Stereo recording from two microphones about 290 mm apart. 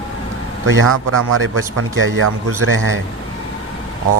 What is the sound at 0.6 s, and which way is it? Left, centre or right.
A man's voice, right.